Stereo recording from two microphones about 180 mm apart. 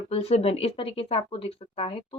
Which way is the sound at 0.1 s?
35° left (ahead or behind).